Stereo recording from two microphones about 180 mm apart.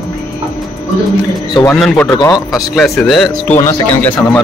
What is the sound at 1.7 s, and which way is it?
A man's voice, 5° left (ahead or behind).